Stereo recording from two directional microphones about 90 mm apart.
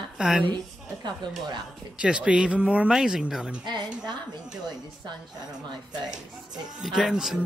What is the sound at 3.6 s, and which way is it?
Speech, 55° right (ahead or behind).